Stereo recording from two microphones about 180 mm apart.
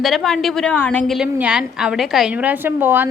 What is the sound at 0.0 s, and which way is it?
A woman's voice, centre (ahead or behind).